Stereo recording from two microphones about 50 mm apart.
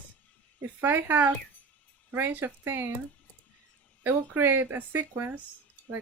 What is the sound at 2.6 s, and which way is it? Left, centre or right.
Speech, right.